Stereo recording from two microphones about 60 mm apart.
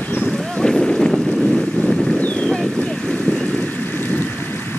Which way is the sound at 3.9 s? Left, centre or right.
Left.